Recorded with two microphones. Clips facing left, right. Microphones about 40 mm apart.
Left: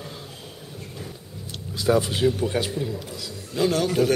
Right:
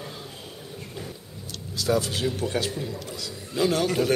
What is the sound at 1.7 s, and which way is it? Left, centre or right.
Speech, centre.